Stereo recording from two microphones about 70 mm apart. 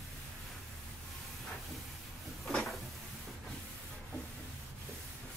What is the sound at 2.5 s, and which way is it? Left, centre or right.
Cupboard open or close, centre.